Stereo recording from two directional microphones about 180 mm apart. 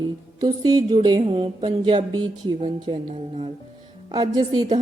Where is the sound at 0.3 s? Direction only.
20° right (ahead or behind).